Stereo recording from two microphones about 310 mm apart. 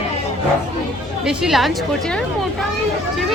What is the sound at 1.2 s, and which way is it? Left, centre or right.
A woman's voice, centre.